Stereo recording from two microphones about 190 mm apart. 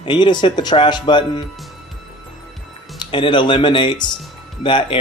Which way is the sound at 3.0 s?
25° left (ahead or behind).